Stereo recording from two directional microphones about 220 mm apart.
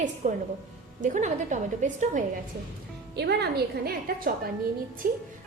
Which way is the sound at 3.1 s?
50° right (ahead or behind).